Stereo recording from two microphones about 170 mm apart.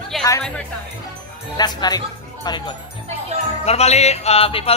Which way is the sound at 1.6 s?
25° left (ahead or behind).